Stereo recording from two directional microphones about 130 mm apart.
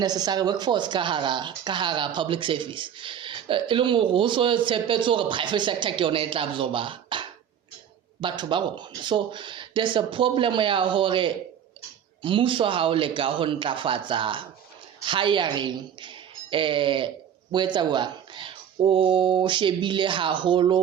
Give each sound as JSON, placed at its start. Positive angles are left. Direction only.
{"t": 0.0, "sound": "a woman's voice", "side_deg": -30}